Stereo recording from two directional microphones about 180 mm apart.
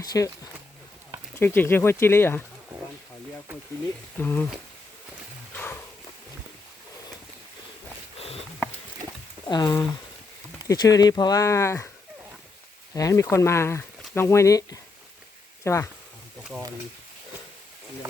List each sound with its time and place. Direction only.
0.0 s speech: 20° left (ahead or behind)
1.4 s speech: 10° left (ahead or behind)
4.2 s speech: 10° left (ahead or behind)
9.5 s speech: 20° left (ahead or behind)
12.9 s speech: 20° left (ahead or behind)
16.4 s a sound: centre (ahead or behind)